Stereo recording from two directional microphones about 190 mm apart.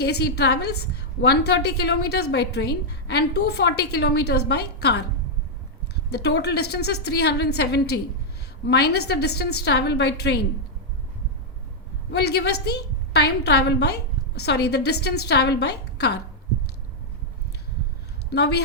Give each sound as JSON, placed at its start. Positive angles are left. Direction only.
{"t": 0.0, "sound": "a woman's voice", "side_deg": 60}
{"t": 6.1, "sound": "a woman's voice", "side_deg": 60}
{"t": 12.1, "sound": "a woman's voice", "side_deg": 60}
{"t": 18.3, "sound": "a woman's voice", "side_deg": 60}